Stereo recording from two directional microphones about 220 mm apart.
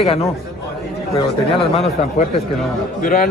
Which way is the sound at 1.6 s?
30° left (ahead or behind).